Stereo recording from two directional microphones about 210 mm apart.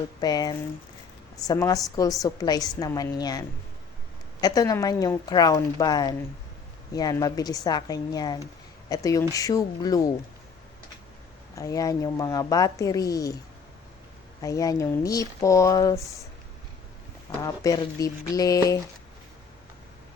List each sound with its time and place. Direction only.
0.2 s a woman's voice: 20° left (ahead or behind)
11.5 s a woman's voice: 15° left (ahead or behind)
14.4 s a woman's voice: 15° left (ahead or behind)
17.4 s a woman's voice: 15° left (ahead or behind)